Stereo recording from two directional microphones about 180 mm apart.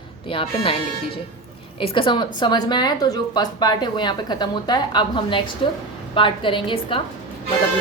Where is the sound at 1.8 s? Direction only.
30° left (ahead or behind).